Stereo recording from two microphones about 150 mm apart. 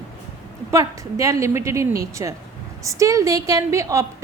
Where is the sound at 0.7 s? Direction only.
20° right (ahead or behind).